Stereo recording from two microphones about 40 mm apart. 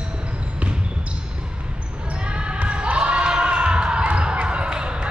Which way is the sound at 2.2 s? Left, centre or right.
Right.